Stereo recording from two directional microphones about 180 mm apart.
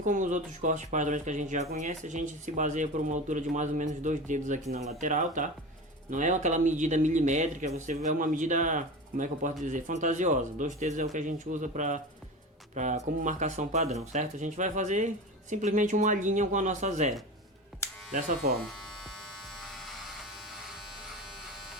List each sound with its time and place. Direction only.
0.0 s speech: 45° right (ahead or behind)
18.1 s speech: 55° right (ahead or behind)
19.6 s electric shaver: centre (ahead or behind)